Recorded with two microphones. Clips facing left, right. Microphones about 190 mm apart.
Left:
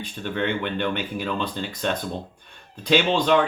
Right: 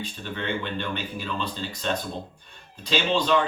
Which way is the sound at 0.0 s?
60° left (ahead or behind).